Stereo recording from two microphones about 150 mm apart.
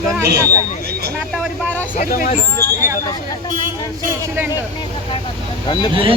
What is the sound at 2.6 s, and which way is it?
Speech, 90° right.